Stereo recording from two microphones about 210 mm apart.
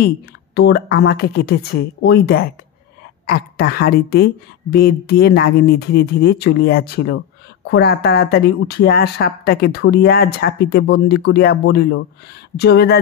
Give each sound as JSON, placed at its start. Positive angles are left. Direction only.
{"t": 0.6, "sound": "speech", "side_deg": 50}